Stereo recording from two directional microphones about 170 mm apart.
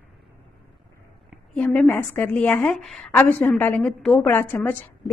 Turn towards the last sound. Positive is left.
turn(degrees=10)  # may be behind; listen again after turning